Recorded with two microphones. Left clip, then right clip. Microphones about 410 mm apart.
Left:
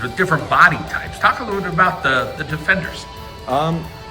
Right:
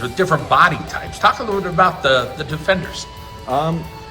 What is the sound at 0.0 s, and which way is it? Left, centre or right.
Speech, centre.